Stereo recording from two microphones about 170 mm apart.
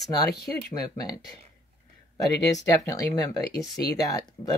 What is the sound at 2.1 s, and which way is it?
Speech, 20° left (ahead or behind).